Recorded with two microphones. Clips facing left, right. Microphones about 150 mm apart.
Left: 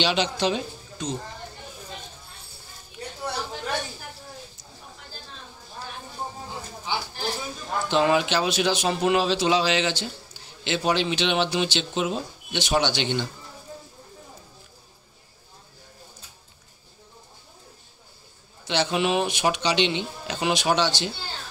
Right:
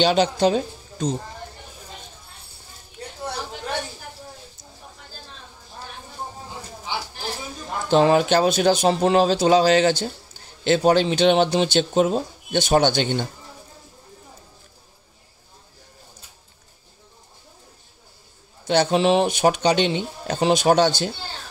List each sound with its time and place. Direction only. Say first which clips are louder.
0.0 s speech: right 6 dB; 45° right (ahead or behind)
7.9 s speech: right 6 dB; 40° right (ahead or behind)
8.8 s speech: right 4 dB; 35° right (ahead or behind)
18.7 s a man's voice: right 6 dB; 40° right (ahead or behind)
19.2 s speech: right 6 dB; 45° right (ahead or behind)